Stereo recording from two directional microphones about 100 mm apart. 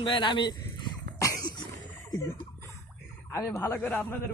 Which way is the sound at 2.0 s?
35° left (ahead or behind).